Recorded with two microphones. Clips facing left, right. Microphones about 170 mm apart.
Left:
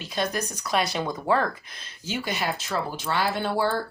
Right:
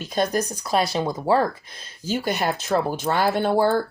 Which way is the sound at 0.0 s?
45° right (ahead or behind).